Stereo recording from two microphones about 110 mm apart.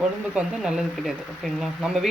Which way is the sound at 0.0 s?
5° right (ahead or behind).